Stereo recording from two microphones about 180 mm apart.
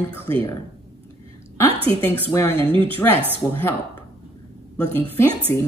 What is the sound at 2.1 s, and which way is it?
Speech, 15° left (ahead or behind).